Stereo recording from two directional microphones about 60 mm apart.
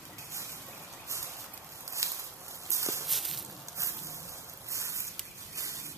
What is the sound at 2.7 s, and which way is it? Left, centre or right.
Walk, right.